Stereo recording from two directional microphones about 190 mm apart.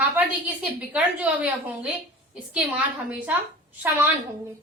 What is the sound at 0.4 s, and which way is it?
A woman's voice, 10° right (ahead or behind).